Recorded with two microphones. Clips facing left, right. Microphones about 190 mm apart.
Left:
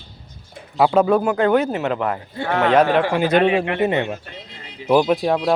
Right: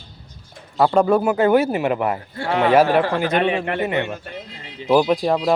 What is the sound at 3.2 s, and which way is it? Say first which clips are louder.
Speech: left 3 dB; 35° left (ahead or behind).